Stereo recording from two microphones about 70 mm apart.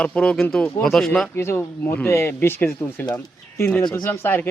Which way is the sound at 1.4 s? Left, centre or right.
Left.